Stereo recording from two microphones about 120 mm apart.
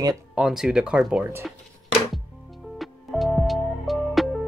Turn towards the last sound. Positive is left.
turn(degrees=0)  # may be behind; listen again after turning